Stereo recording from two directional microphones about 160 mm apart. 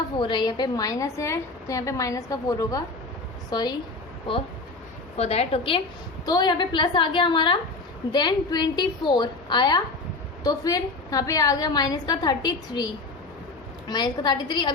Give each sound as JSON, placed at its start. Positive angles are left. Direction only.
{"t": 0.2, "sound": "a woman's voice", "side_deg": 30}
{"t": 5.1, "sound": "a woman's voice", "side_deg": 40}
{"t": 6.2, "sound": "a woman's voice", "side_deg": 25}